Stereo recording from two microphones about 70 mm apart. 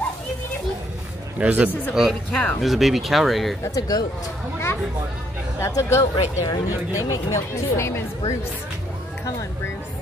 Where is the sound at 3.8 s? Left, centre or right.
Left.